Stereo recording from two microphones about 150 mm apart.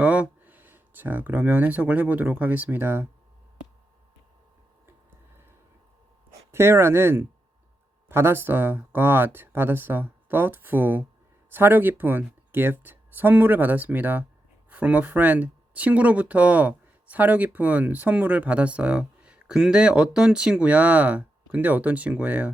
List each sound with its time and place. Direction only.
0.0 s speech: 10° right (ahead or behind)
6.5 s speech: 15° right (ahead or behind)